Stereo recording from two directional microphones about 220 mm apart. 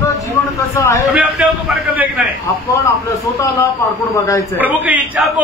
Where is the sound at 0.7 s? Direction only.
10° left (ahead or behind).